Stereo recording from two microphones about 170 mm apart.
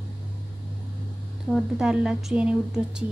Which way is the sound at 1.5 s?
5° right (ahead or behind).